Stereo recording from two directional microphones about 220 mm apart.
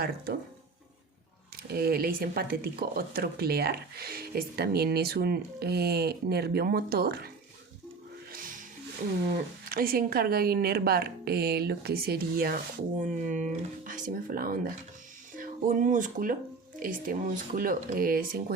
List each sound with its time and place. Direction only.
1.5 s speech: 45° right (ahead or behind)
8.3 s music: 40° right (ahead or behind)
9.6 s speech: 40° right (ahead or behind)